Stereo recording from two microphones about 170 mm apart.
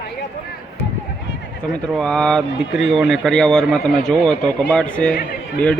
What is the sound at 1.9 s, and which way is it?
Speech, 5° left (ahead or behind).